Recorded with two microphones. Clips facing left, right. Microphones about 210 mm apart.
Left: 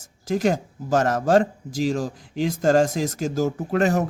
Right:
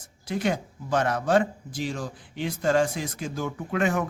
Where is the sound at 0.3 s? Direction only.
40° left (ahead or behind).